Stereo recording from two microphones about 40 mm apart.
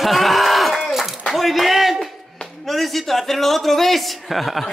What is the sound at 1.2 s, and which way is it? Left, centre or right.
A man's voice, centre.